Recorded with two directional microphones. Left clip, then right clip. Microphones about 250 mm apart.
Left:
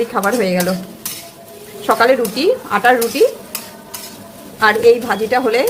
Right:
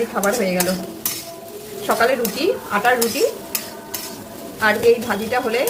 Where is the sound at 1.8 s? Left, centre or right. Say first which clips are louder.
Left 5 dB; left.